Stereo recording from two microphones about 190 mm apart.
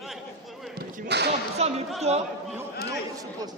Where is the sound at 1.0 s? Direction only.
60° right (ahead or behind).